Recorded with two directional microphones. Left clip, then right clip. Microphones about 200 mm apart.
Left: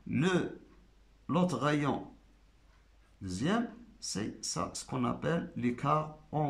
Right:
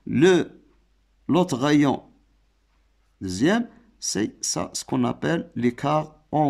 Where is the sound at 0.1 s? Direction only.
50° right (ahead or behind).